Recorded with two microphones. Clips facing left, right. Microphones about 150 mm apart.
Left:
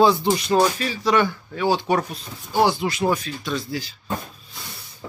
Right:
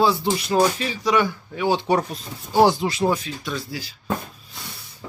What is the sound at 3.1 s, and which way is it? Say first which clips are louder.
Speech: left 1 dB; 10° right (ahead or behind).